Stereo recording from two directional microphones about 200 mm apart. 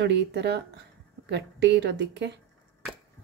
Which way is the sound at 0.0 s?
60° right (ahead or behind).